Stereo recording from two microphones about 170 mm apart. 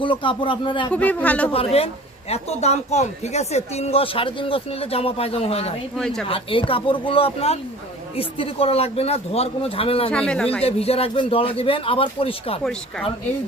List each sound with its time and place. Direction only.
0.0 s speech: 30° left (ahead or behind)
0.9 s speech: 10° left (ahead or behind)
1.5 s speech: 35° left (ahead or behind)
6.0 s a man's voice: 5° left (ahead or behind)
6.2 s speech: 30° left (ahead or behind)
10.1 s a man's voice: 5° left (ahead or behind)
10.6 s speech: 35° left (ahead or behind)